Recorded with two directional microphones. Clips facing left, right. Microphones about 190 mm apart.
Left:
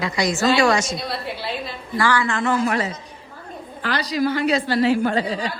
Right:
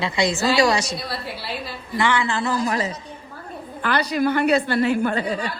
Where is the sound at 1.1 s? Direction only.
5° right (ahead or behind).